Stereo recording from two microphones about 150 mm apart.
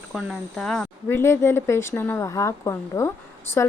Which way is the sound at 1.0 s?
15° left (ahead or behind).